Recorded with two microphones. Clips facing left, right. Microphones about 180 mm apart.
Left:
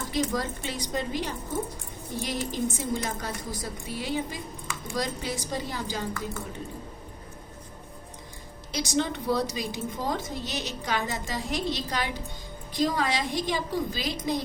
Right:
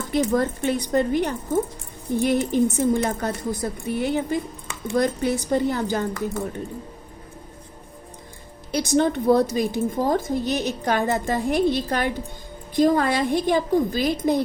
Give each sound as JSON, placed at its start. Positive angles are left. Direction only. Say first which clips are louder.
{"t": 0.1, "sound": "a woman's voice", "louder": "right 8 dB", "side_deg": -55}
{"t": 8.7, "sound": "a woman's voice", "louder": "right 8 dB", "side_deg": -55}